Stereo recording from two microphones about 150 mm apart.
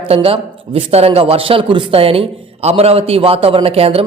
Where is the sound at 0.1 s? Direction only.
40° right (ahead or behind).